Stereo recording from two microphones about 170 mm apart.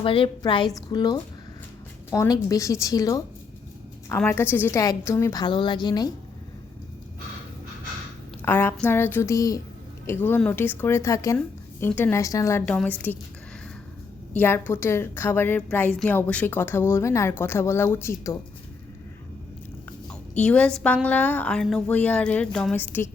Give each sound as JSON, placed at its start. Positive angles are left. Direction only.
{"t": 0.0, "sound": "a woman's voice", "side_deg": 30}
{"t": 8.4, "sound": "a woman's voice", "side_deg": 10}
{"t": 14.3, "sound": "a woman's voice", "side_deg": 15}
{"t": 20.4, "sound": "a woman's voice", "side_deg": 5}